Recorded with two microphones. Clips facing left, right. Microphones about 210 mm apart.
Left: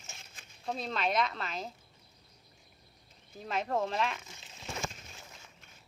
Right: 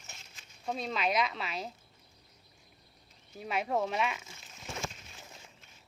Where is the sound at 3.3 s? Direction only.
5° right (ahead or behind).